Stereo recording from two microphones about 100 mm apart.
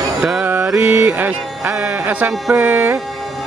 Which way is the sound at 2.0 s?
15° right (ahead or behind).